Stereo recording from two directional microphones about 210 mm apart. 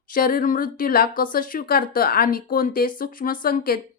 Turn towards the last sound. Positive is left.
turn(degrees=45)  # may be behind; listen again after turning